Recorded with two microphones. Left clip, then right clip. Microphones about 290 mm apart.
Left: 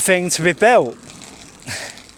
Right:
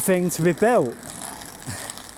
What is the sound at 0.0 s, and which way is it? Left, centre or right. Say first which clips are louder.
Speech: left 5 dB; left.